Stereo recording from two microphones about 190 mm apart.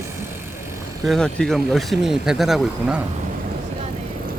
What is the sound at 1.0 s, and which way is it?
Speech, 5° left (ahead or behind).